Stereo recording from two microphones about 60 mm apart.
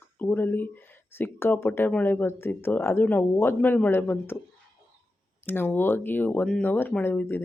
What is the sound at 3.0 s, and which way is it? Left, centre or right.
Speech, left.